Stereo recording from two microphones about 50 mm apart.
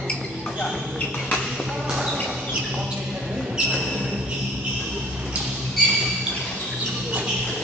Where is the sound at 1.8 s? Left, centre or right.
Centre.